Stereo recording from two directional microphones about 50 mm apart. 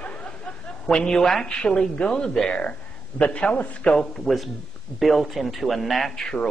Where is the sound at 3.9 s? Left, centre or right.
Centre.